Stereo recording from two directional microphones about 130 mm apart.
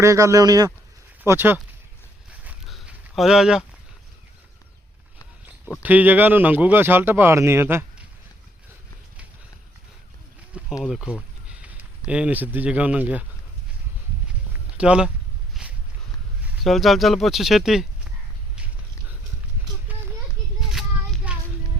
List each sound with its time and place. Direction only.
0.0 s speech: 25° right (ahead or behind)
1.2 s speech: 15° right (ahead or behind)
2.6 s a sound: centre (ahead or behind)
5.8 s speech: 15° right (ahead or behind)
10.8 s speech: 5° right (ahead or behind)
14.8 s speech: 5° right (ahead or behind)
15.6 s walk: centre (ahead or behind)
16.6 s speech: centre (ahead or behind)
18.5 s a sound: 10° right (ahead or behind)
20.6 s child singing: 5° right (ahead or behind)
21.3 s a sound: 10° right (ahead or behind)